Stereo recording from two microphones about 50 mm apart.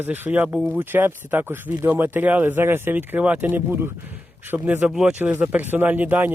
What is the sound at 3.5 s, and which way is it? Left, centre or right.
Speech, right.